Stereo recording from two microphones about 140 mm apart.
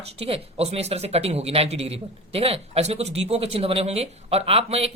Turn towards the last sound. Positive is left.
turn(degrees=-45)  # may be behind; listen again after turning